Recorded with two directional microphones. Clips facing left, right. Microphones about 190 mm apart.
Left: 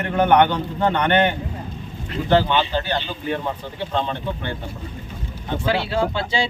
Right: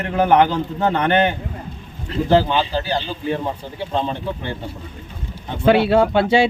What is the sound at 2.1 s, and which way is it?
Speech, 35° right (ahead or behind).